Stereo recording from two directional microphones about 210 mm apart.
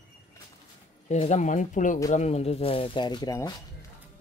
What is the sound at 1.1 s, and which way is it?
Speech, 35° left (ahead or behind).